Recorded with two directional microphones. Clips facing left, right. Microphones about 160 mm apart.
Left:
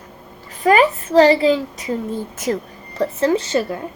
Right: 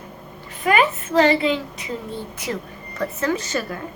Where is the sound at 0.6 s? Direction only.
35° left (ahead or behind).